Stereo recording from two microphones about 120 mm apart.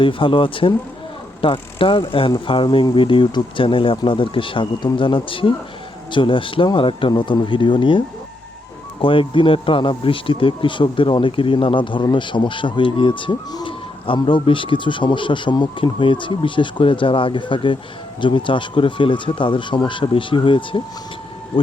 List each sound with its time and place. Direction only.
0.0 s speech: 45° left (ahead or behind)